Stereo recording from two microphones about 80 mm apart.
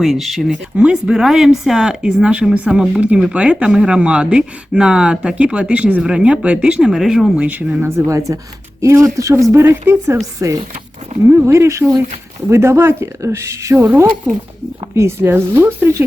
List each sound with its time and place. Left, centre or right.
0.0 s speech: centre
7.3 s speech: centre
7.8 s speech: right